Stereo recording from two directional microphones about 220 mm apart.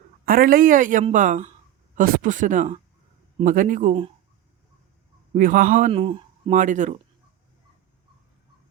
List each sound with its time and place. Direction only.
0.3 s a woman's voice: 40° right (ahead or behind)
5.3 s a woman's voice: 35° right (ahead or behind)
5.9 s speech: 25° right (ahead or behind)